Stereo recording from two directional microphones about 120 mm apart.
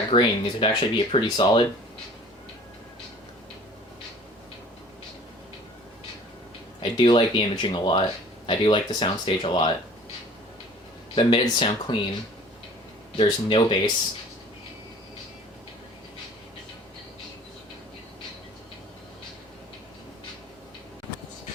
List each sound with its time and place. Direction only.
0.1 s speech: 45° left (ahead or behind)
6.9 s speech: 45° left (ahead or behind)
11.1 s speech: 45° left (ahead or behind)
13.1 s speech: 45° left (ahead or behind)